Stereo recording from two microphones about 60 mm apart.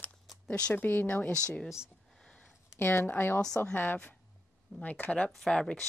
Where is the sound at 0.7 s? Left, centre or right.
Left.